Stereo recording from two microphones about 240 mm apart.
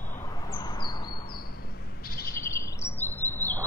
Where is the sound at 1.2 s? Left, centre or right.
Left.